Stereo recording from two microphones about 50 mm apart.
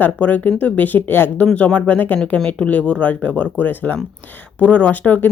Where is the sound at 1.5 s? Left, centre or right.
Left.